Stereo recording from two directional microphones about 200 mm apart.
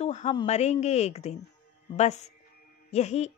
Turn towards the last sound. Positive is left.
turn(degrees=35)  # may be behind; listen again after turning